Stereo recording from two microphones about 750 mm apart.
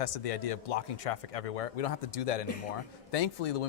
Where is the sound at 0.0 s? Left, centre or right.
Left.